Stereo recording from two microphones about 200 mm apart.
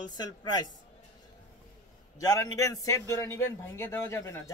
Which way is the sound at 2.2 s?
15° left (ahead or behind).